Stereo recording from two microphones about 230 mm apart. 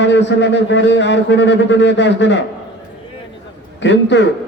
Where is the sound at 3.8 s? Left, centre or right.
Left.